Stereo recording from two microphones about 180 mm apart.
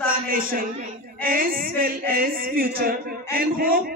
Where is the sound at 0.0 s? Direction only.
50° right (ahead or behind).